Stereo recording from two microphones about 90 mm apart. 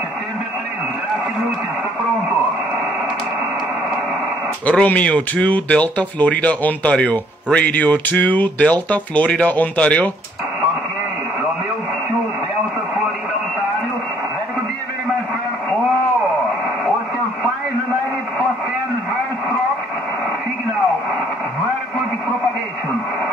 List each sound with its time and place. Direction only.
4.6 s speech: 15° left (ahead or behind)